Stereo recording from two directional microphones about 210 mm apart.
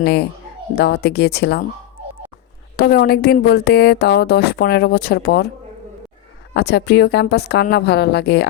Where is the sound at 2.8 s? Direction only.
50° left (ahead or behind).